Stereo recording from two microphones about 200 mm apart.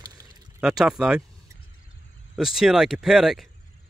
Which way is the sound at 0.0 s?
20° right (ahead or behind).